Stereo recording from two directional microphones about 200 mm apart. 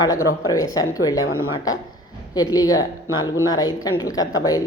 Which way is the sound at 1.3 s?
90° left.